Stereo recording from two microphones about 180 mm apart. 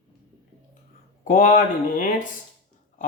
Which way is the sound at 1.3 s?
45° left (ahead or behind).